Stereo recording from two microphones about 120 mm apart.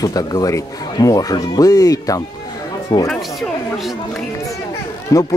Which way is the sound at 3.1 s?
Centre (ahead or behind).